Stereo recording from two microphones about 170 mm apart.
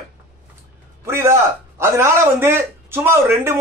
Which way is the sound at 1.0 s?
15° right (ahead or behind).